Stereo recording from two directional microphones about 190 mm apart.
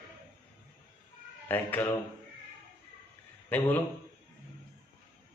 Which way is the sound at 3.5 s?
10° left (ahead or behind).